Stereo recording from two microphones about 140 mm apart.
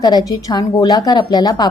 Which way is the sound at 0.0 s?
30° left (ahead or behind).